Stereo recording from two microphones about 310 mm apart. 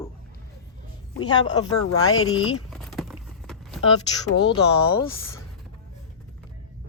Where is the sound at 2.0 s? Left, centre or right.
Left.